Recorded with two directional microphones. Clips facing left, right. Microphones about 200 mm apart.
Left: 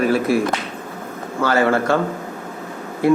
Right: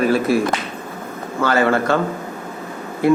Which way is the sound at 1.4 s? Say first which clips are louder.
Even; 25° left (ahead or behind).